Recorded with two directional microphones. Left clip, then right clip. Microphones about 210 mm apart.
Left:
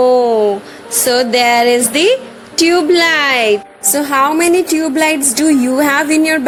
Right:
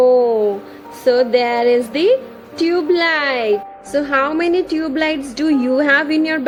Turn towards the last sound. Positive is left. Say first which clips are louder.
# left 3 dB
turn(degrees=30)  # may be behind; listen again after turning